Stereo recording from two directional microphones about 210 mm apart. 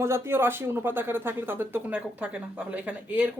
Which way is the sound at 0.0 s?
10° right (ahead or behind).